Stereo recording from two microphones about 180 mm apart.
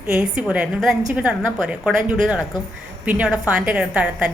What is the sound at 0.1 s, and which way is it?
A woman's voice, 5° right (ahead or behind).